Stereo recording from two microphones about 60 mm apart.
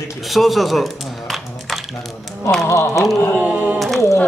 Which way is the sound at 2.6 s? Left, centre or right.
Left.